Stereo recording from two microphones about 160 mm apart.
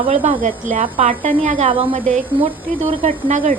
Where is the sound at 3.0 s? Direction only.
50° right (ahead or behind).